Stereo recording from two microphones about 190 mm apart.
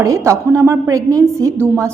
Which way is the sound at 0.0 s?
15° right (ahead or behind).